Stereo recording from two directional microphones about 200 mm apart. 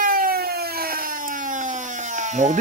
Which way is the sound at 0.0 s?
45° right (ahead or behind).